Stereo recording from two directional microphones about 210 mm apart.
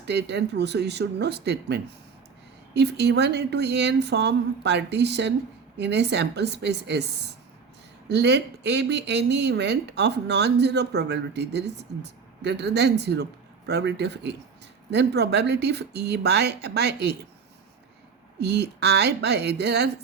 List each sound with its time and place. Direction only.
0.0 s speech: 55° right (ahead or behind)
8.1 s speech: 55° right (ahead or behind)
18.3 s speech: 50° right (ahead or behind)